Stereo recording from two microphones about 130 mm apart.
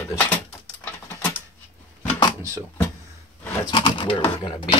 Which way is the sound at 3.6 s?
35° left (ahead or behind).